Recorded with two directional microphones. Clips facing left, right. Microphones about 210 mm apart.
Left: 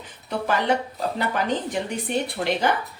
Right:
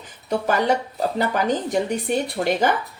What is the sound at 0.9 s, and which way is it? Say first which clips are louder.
Speech: right 3 dB; 45° right (ahead or behind).